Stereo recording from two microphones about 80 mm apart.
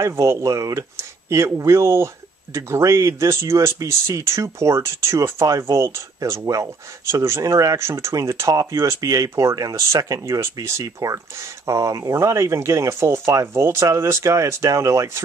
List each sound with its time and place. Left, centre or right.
0.0 s speech: right
7.4 s speech: right
7.7 s speech: right
10.4 s speech: right